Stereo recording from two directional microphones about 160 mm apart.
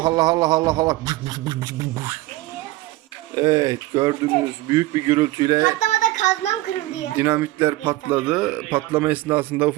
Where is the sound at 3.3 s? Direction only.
25° right (ahead or behind).